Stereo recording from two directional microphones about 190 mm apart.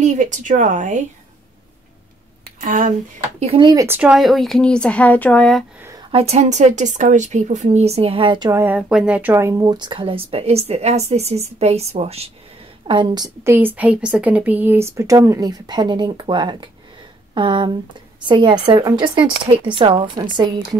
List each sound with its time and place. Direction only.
0.0 s speech: 40° right (ahead or behind)
2.6 s speech: 40° right (ahead or behind)
3.3 s speech: 30° right (ahead or behind)
3.8 s speech: 10° right (ahead or behind); by 5.6 s 5° left (ahead or behind)
5.8 s a sound: 15° right (ahead or behind)
6.1 s a woman's voice: 35° right (ahead or behind)